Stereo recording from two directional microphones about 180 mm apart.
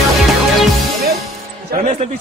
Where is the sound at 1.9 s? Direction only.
35° right (ahead or behind).